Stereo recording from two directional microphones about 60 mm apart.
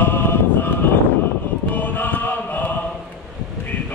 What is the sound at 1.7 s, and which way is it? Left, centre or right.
Chant, left.